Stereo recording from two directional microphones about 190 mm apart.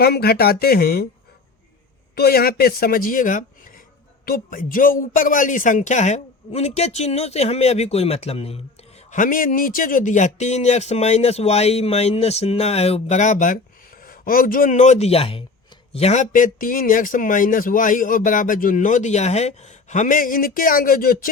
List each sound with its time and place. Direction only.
0.0 s speech: 55° left (ahead or behind)
2.1 s speech: 55° left (ahead or behind); by 8.6 s 30° left (ahead or behind)
9.1 s speech: 45° left (ahead or behind)